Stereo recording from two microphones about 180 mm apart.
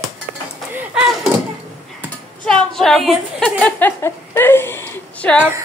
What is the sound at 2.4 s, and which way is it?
A woman's voice, 5° left (ahead or behind).